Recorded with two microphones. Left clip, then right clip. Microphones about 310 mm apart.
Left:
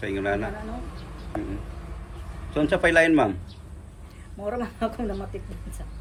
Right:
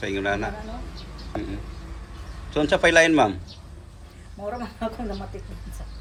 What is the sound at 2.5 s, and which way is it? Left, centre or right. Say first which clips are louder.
Speech: right 2 dB; centre.